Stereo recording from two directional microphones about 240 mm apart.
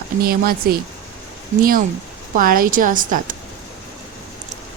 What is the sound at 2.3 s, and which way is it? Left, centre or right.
Speech, right.